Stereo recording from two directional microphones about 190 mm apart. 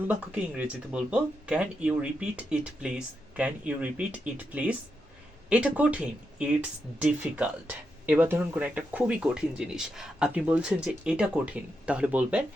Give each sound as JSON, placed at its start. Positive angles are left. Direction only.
{"t": 0.1, "sound": "speech", "side_deg": -5}